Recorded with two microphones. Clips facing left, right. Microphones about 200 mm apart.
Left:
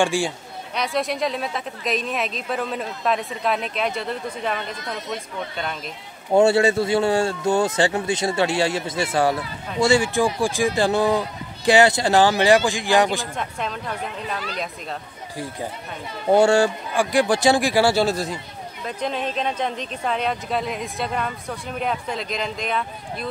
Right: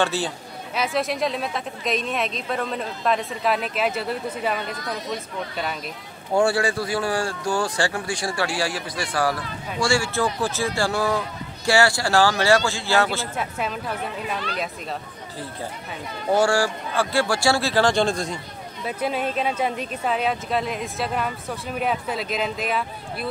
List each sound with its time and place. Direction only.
0.0 s a man's voice: 10° left (ahead or behind)
0.7 s speech: centre (ahead or behind)
6.3 s speech: 25° left (ahead or behind)
13.4 s speech: 5° right (ahead or behind)
15.3 s a man's voice: 10° left (ahead or behind)
16.3 s a man's voice: 25° left (ahead or behind); by 18.4 s 5° left (ahead or behind)
18.9 s speech: 5° right (ahead or behind)